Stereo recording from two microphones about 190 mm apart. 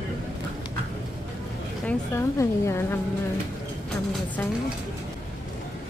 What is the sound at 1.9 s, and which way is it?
A woman's voice, 15° left (ahead or behind).